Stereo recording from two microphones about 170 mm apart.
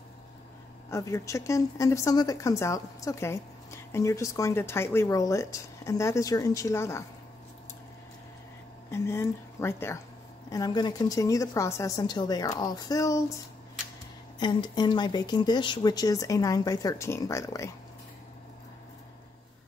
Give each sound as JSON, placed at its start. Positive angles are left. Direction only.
{"t": 0.8, "sound": "speech", "side_deg": 15}
{"t": 8.9, "sound": "speech", "side_deg": 15}
{"t": 14.4, "sound": "speech", "side_deg": 25}